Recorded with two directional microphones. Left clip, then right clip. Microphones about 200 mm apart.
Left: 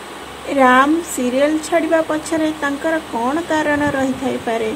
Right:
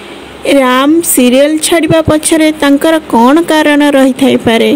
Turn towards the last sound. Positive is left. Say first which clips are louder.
# right 12 dB
turn(degrees=-55)  # may be behind; listen again after turning